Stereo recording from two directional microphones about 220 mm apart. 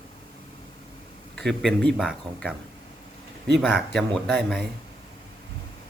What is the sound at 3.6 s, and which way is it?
Speech, centre (ahead or behind).